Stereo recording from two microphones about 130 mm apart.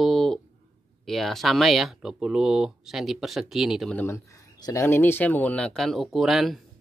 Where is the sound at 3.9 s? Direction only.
20° left (ahead or behind); by 6.6 s centre (ahead or behind).